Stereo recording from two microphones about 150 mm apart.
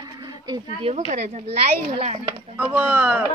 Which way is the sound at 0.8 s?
50° right (ahead or behind).